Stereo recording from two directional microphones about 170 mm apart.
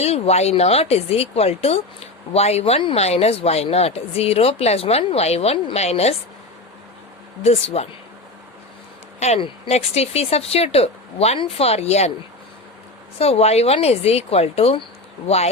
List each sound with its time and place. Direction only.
0.0 s speech: 40° left (ahead or behind)
7.4 s speech: 35° left (ahead or behind)
9.2 s speech: 40° left (ahead or behind)
13.1 s speech: 35° left (ahead or behind)